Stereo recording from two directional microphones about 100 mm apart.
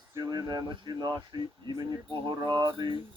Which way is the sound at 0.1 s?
40° right (ahead or behind).